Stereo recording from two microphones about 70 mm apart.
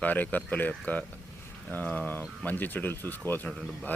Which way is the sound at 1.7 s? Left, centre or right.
Left.